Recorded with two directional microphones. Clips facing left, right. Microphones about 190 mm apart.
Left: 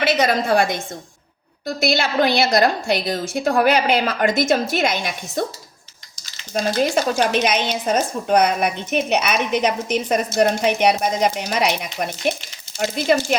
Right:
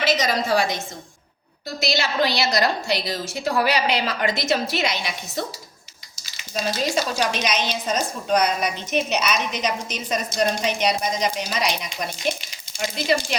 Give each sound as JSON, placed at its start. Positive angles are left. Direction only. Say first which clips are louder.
{"t": 0.0, "sound": "a woman's voice", "louder": "left 4 dB", "side_deg": 60}
{"t": 6.5, "sound": "a woman's voice", "louder": "left 5 dB", "side_deg": 55}